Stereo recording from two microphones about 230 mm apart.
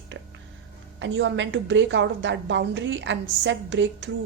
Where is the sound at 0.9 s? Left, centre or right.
Right.